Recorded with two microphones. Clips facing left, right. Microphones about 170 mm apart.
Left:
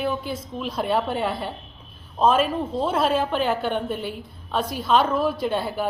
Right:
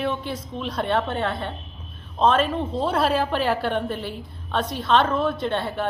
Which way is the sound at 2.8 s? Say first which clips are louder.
Even; centre (ahead or behind).